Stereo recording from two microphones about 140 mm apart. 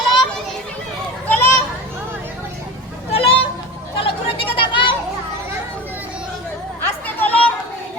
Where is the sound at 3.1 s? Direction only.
40° left (ahead or behind).